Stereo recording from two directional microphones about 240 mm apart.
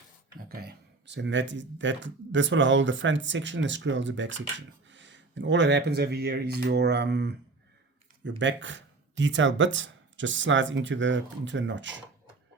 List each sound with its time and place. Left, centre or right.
0.4 s speech: right